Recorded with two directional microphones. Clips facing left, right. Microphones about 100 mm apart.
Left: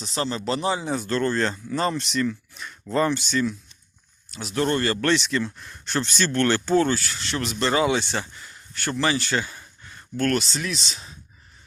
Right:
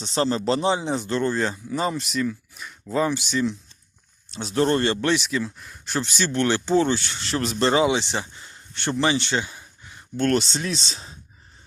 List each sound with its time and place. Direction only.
0.0 s speech: 30° right (ahead or behind); by 3.5 s 15° right (ahead or behind)
4.3 s speech: 30° right (ahead or behind)
4.9 s speech: 15° right (ahead or behind)
8.4 s a sound: 30° right (ahead or behind)
10.2 s speech: 30° right (ahead or behind)